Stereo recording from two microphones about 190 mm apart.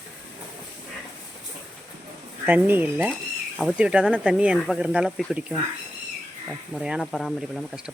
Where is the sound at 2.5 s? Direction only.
10° right (ahead or behind).